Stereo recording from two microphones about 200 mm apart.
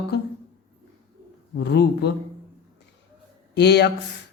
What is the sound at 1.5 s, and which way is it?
Speech, 55° left (ahead or behind).